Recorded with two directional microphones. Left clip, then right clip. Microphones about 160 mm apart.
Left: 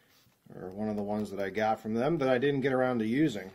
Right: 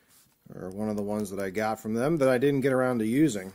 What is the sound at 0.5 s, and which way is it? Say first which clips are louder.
Speech: right 3 dB; 25° right (ahead or behind).